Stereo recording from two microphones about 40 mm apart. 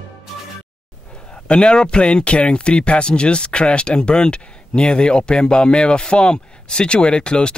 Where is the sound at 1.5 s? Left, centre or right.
Centre.